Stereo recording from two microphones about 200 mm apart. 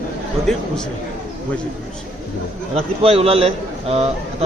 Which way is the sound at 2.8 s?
30° right (ahead or behind).